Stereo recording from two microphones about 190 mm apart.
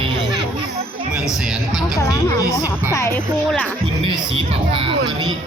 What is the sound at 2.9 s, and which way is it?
Speech, 15° left (ahead or behind).